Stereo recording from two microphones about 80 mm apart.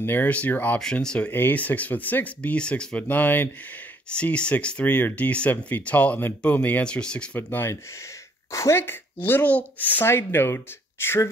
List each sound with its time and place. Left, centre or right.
0.0 s speech: left
0.7 s speech: centre
7.3 s speech: left
8.5 s speech: left